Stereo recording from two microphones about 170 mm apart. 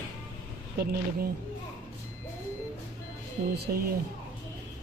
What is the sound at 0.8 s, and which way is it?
Speech, 70° right (ahead or behind).